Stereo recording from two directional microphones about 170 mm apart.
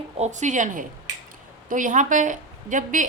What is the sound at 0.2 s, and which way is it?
A woman's voice, 45° right (ahead or behind).